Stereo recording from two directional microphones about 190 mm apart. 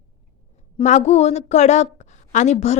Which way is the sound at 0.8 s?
35° left (ahead or behind).